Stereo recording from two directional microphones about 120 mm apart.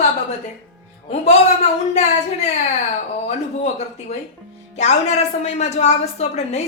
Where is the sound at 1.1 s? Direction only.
65° left (ahead or behind).